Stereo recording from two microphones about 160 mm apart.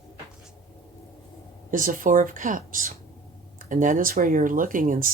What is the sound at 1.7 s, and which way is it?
Speech, 55° right (ahead or behind).